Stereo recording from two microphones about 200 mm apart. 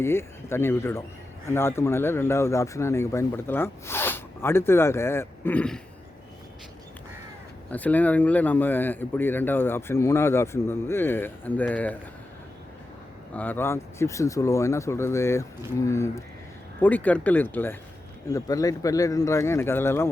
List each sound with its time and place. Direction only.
0.0 s speech: 15° left (ahead or behind)
7.7 s speech: 5° left (ahead or behind)
13.3 s speech: 10° left (ahead or behind)